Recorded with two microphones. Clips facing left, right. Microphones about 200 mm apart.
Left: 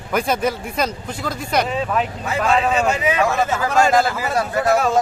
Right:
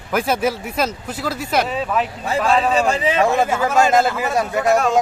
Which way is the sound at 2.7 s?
35° right (ahead or behind).